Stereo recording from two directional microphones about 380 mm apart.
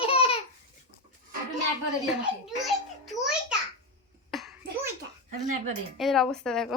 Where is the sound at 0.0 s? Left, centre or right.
Centre.